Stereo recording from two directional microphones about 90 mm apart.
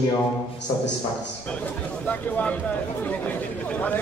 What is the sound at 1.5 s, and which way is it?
A man's voice, 15° left (ahead or behind).